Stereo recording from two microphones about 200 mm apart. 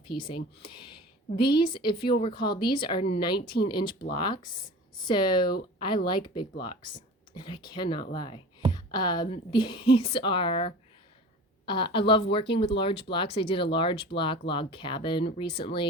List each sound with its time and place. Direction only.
0.1 s a woman's voice: 25° left (ahead or behind)
8.7 s a sound: 20° left (ahead or behind)
9.3 s a woman's voice: 25° left (ahead or behind)